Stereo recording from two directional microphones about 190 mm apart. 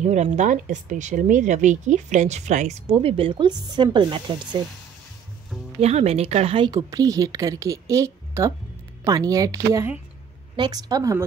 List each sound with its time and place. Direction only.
0.0 s speech: 40° right (ahead or behind); by 4.6 s 25° right (ahead or behind)
5.8 s a woman's voice: 35° right (ahead or behind); by 11.2 s 15° right (ahead or behind)